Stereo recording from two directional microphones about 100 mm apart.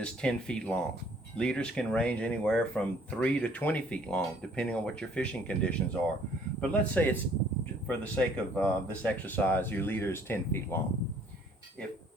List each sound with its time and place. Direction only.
0.0 s speech: 10° left (ahead or behind)